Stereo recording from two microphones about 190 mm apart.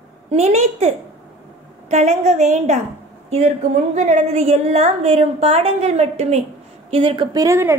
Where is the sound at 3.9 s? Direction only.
40° right (ahead or behind).